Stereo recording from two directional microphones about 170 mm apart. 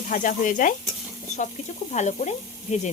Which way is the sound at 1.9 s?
45° left (ahead or behind).